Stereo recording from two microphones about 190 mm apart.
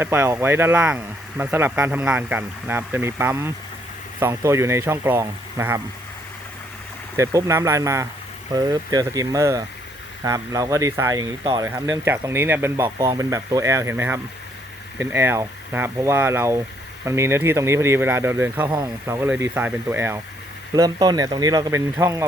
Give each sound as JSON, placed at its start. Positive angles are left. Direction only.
{"t": 0.0, "sound": "speech", "side_deg": -10}
{"t": 7.2, "sound": "speech", "side_deg": -15}